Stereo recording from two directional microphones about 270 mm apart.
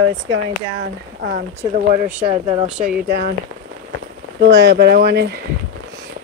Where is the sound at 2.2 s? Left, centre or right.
Centre.